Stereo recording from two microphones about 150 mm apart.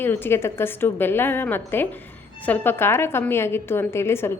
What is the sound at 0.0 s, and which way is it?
A woman's voice, 15° left (ahead or behind).